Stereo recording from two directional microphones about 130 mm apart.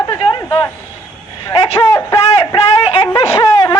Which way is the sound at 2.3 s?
45° left (ahead or behind).